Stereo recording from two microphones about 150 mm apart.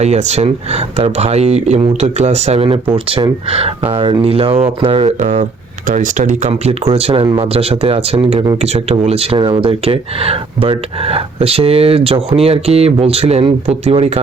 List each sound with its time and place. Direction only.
0.0 s speech: 50° right (ahead or behind)
5.9 s speech: 60° right (ahead or behind)
6.9 s speech: 40° right (ahead or behind)